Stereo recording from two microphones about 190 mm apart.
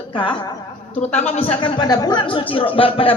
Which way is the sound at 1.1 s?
35° left (ahead or behind).